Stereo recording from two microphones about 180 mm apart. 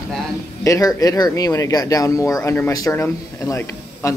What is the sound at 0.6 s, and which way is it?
Speech, 20° left (ahead or behind).